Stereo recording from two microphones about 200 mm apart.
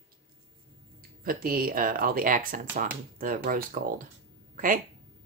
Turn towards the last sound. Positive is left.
turn(degrees=-45)  # may be behind; listen again after turning